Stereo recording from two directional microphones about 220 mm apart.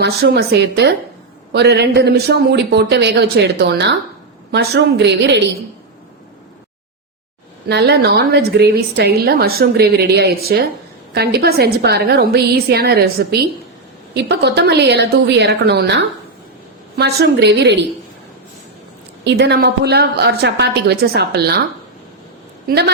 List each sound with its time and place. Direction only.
0.0 s a woman's voice: 50° right (ahead or behind)
7.7 s a woman's voice: 50° right (ahead or behind)
19.2 s a woman's voice: 50° right (ahead or behind)
22.6 s a woman's voice: 50° right (ahead or behind)